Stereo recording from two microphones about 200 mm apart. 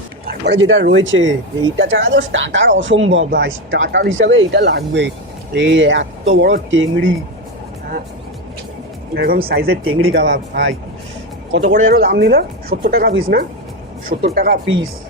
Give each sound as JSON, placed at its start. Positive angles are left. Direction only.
{"t": 0.3, "sound": "speech", "side_deg": -60}
{"t": 9.1, "sound": "speech", "side_deg": -50}
{"t": 9.8, "sound": "speech", "side_deg": -90}
{"t": 10.1, "sound": "speech", "side_deg": -60}
{"t": 11.7, "sound": "speech", "side_deg": -50}